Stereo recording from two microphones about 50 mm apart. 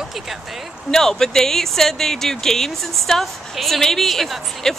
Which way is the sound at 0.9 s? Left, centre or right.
Centre.